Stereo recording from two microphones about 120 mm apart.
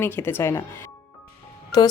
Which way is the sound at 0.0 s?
20° left (ahead or behind).